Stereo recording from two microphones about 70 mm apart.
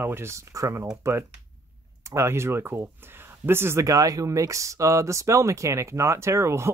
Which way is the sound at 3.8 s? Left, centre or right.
Right.